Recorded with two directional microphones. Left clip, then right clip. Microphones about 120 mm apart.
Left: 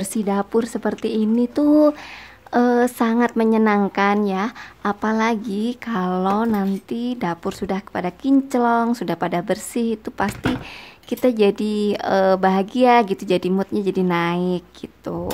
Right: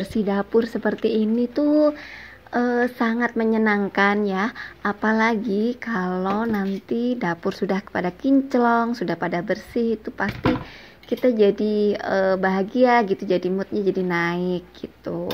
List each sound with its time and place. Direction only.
0.0 s speech: 15° left (ahead or behind)
1.5 s speech: 25° left (ahead or behind)
3.9 s speech: 5° left (ahead or behind)